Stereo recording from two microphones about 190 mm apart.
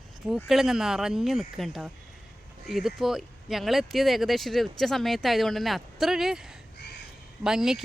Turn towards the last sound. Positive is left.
turn(degrees=0)  # may be behind; listen again after turning